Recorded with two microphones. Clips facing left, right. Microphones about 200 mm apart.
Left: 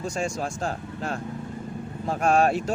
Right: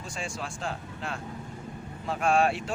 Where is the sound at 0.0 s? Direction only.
40° left (ahead or behind).